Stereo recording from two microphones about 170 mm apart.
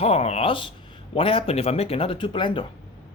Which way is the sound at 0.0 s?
40° left (ahead or behind).